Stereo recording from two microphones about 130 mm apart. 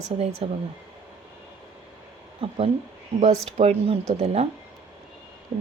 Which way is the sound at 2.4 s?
50° right (ahead or behind).